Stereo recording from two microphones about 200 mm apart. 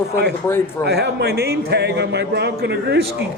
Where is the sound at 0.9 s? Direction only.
55° right (ahead or behind).